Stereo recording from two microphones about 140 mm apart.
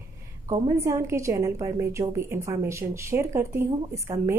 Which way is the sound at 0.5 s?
20° right (ahead or behind).